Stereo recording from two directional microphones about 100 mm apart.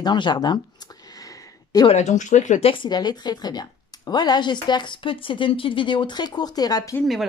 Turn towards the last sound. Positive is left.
turn(degrees=40)  # may be behind; listen again after turning